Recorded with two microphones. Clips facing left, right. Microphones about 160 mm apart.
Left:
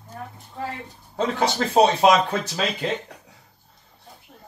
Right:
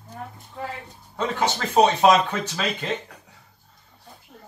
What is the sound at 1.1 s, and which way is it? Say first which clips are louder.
Speech: left 2 dB; 35° left (ahead or behind).